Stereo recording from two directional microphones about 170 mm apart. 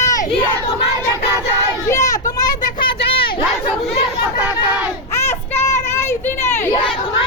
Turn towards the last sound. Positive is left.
turn(degrees=15)  # may be behind; listen again after turning